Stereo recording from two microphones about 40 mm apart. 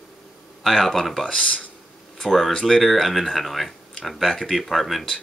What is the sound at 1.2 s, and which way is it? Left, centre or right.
Speech, left.